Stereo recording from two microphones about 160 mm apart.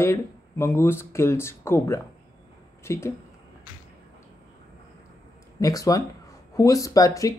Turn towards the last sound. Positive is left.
turn(degrees=20)  # may be behind; listen again after turning